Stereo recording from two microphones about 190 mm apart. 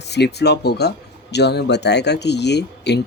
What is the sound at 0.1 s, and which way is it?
Speech, 60° left (ahead or behind).